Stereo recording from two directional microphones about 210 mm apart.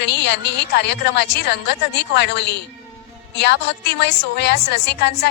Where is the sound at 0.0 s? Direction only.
55° left (ahead or behind).